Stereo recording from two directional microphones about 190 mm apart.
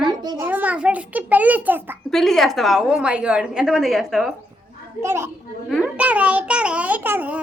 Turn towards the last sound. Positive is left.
turn(degrees=-10)  # may be behind; listen again after turning